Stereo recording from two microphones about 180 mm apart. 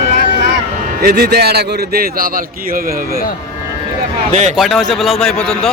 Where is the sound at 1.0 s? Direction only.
60° right (ahead or behind).